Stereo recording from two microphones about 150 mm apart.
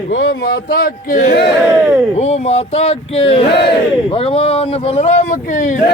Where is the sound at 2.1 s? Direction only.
45° left (ahead or behind).